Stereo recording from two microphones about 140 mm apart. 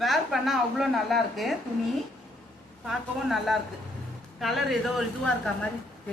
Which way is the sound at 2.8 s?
Centre (ahead or behind).